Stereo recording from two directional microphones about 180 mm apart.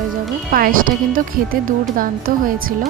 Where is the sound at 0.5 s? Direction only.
50° right (ahead or behind).